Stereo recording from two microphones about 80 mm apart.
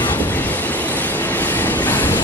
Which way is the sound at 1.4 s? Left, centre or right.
Left.